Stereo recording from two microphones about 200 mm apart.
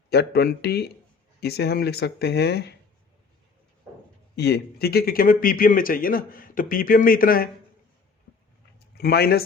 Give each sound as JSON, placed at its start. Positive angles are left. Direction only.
{"t": 0.1, "sound": "speech", "side_deg": 55}
{"t": 4.4, "sound": "speech", "side_deg": 55}
{"t": 9.0, "sound": "speech", "side_deg": 50}